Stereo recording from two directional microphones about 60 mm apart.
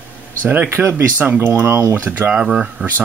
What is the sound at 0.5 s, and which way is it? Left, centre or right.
Speech, right.